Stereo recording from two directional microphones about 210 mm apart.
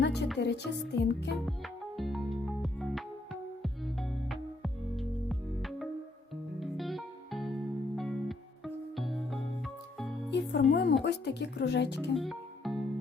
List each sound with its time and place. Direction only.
0.0 s music: 55° left (ahead or behind)
1.5 s music: centre (ahead or behind)
10.3 s music: 55° left (ahead or behind)
11.0 s speech: 55° left (ahead or behind)
12.1 s music: centre (ahead or behind)